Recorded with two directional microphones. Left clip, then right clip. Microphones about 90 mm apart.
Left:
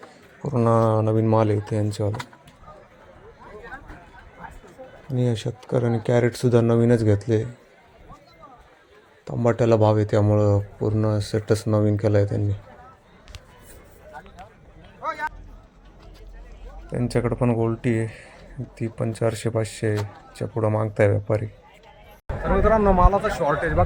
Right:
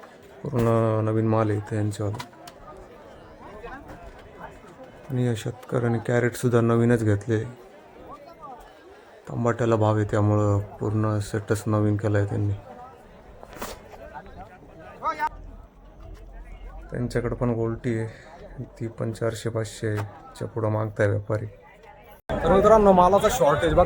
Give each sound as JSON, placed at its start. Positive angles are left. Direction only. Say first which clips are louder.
{"t": 0.5, "sound": "a sound", "louder": "left 3 dB", "side_deg": -10}
{"t": 0.9, "sound": "speech", "louder": "left 3 dB", "side_deg": 20}
{"t": 5.1, "sound": "speech", "louder": "left 2 dB", "side_deg": 20}
{"t": 9.4, "sound": "speech", "louder": "left 4 dB", "side_deg": 25}
{"t": 15.0, "sound": "a sound", "louder": "right 1 dB", "side_deg": 0}
{"t": 17.0, "sound": "speech", "louder": "left 3 dB", "side_deg": 35}
{"t": 22.4, "sound": "a man's voice", "louder": "right 3 dB", "side_deg": -25}